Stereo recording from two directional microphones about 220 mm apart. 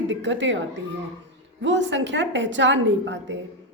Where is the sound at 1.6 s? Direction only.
55° right (ahead or behind).